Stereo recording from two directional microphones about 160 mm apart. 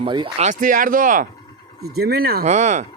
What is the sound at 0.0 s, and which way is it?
Speech, 30° right (ahead or behind).